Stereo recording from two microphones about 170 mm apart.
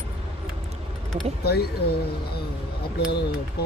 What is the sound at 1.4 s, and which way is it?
Speech, 70° left (ahead or behind).